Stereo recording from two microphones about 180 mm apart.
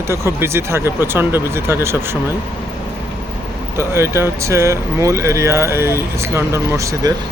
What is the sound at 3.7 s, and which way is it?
Speech, 15° right (ahead or behind).